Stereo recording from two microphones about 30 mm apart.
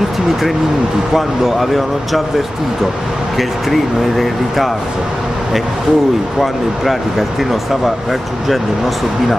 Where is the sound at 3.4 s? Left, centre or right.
Centre.